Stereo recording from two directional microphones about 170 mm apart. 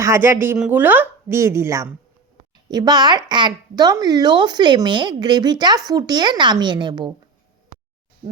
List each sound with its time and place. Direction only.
0.0 s speech: 15° right (ahead or behind)